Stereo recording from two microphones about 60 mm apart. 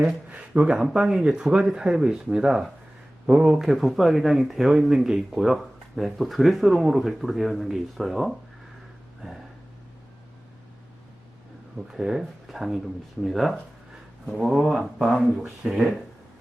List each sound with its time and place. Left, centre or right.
0.3 s speech: right
0.9 s speech: centre
11.9 s speech: centre
15.4 s speech: centre